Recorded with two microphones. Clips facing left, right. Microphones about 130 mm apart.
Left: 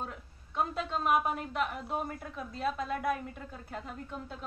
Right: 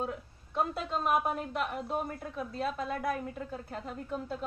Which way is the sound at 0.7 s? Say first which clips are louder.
Left 2 dB; centre (ahead or behind).